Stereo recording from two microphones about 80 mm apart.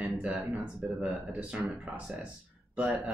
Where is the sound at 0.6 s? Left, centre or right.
Centre.